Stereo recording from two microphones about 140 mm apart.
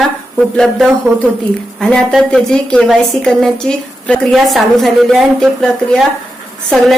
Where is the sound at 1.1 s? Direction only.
15° right (ahead or behind).